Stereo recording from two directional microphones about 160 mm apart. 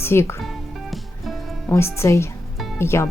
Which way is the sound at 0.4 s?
Centre (ahead or behind).